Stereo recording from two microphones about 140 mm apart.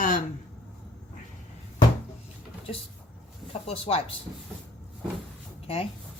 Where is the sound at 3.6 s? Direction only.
45° left (ahead or behind).